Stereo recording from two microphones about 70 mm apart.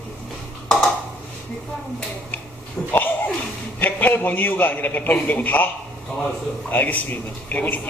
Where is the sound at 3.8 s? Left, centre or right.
Left.